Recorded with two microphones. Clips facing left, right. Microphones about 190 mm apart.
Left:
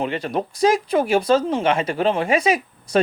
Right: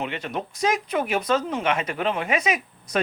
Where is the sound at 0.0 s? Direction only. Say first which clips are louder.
Left 6 dB; 35° left (ahead or behind).